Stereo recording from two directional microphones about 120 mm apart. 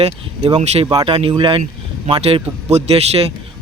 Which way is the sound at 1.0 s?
45° right (ahead or behind).